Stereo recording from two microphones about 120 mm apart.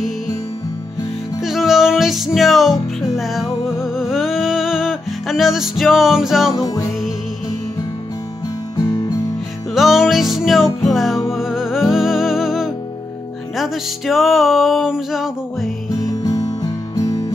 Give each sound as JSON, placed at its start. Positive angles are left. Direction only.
{"t": 1.4, "sound": "music", "side_deg": 0}
{"t": 6.5, "sound": "music", "side_deg": 30}
{"t": 8.7, "sound": "music", "side_deg": 30}
{"t": 9.8, "sound": "music", "side_deg": 0}
{"t": 15.9, "sound": "music", "side_deg": 30}